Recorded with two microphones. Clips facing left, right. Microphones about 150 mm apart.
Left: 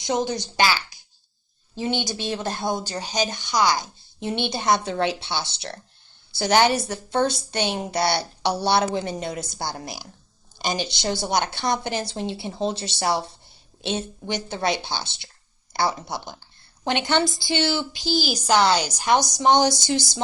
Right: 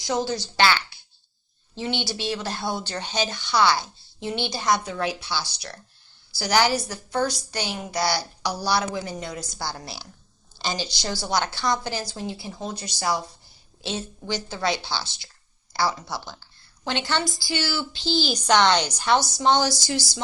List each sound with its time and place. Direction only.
0.0 s a woman's voice: 20° left (ahead or behind)
1.9 s speech: 45° left (ahead or behind)
2.3 s a woman's voice: 20° left (ahead or behind)
9.8 s a woman's voice: 15° left (ahead or behind)